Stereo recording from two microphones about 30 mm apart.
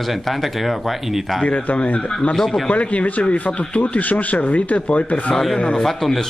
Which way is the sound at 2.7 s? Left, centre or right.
Left.